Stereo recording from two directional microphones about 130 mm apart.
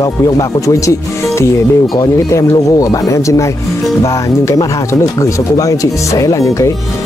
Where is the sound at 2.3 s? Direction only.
25° left (ahead or behind).